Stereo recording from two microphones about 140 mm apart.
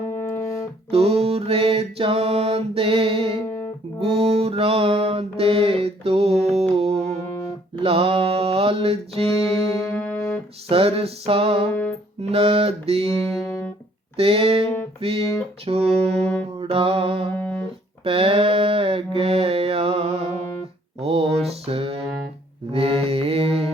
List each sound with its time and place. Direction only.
0.1 s music: 15° left (ahead or behind)
0.9 s music: 45° right (ahead or behind)
3.4 s music: 15° left (ahead or behind)
4.0 s music: 45° right (ahead or behind)
7.8 s mantra: 40° right (ahead or behind)
9.3 s music: 25° left (ahead or behind)
10.7 s music: 45° right (ahead or behind)
13.1 s music: 25° left (ahead or behind)
14.2 s music: 45° right (ahead or behind)
17.3 s music: 15° left (ahead or behind)
18.0 s mantra: 40° right (ahead or behind)
21.0 s a sound: 45° right (ahead or behind)
21.7 s music: 45° right (ahead or behind)
22.7 s mantra: 45° right (ahead or behind)